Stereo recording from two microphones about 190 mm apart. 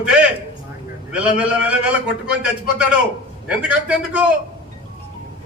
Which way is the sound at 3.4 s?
5° right (ahead or behind).